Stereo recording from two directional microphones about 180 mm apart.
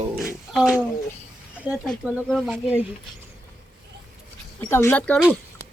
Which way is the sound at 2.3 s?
Centre (ahead or behind).